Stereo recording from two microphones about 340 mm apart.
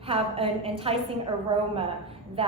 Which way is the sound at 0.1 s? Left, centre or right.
Centre.